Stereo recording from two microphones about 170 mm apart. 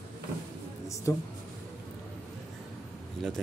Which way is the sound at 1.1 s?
20° left (ahead or behind).